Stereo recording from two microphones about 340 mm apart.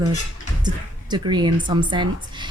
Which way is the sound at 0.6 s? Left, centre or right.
Centre.